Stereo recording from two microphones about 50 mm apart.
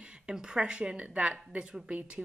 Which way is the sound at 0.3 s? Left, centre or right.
Centre.